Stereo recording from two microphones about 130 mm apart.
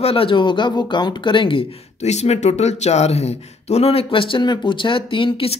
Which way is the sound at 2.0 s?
55° left (ahead or behind).